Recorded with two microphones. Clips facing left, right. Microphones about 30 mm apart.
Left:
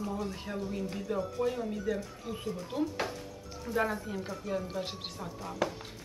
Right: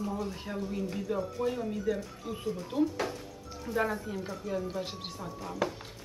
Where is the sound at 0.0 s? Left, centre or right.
Centre.